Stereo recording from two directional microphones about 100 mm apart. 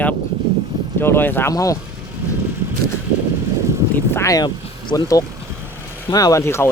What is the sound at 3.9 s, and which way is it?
Speech, 25° left (ahead or behind).